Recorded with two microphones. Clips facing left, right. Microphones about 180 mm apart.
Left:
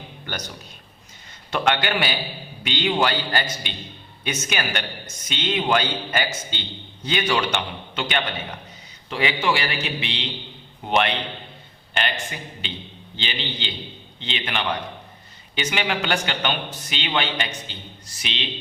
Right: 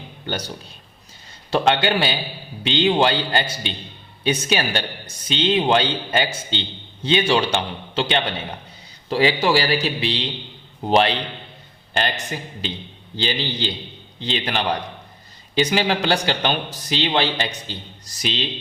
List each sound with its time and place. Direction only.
0.3 s a man's voice: 30° right (ahead or behind)